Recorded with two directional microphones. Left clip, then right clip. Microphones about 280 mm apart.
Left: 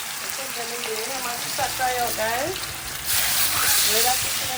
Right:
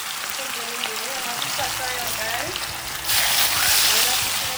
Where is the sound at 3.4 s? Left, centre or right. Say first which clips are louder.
Right 3 dB; centre.